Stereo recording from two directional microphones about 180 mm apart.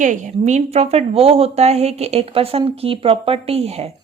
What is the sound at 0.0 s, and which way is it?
A woman's voice, 45° right (ahead or behind).